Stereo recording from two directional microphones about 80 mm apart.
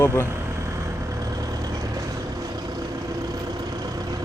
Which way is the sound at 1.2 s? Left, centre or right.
Right.